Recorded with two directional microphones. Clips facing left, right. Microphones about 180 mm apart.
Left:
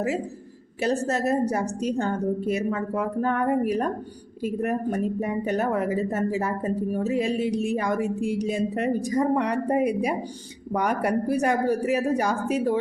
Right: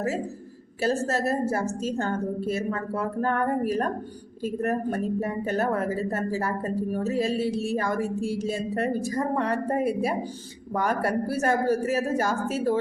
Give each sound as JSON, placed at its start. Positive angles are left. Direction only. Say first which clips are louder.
{"t": 0.8, "sound": "speech", "louder": "left 1 dB", "side_deg": 20}